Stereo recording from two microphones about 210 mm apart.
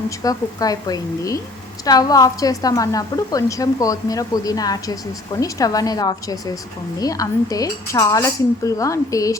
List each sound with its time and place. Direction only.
0.2 s a woman's voice: 15° left (ahead or behind)